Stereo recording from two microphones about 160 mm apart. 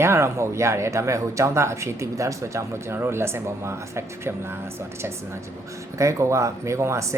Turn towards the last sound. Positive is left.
turn(degrees=-20)  # may be behind; listen again after turning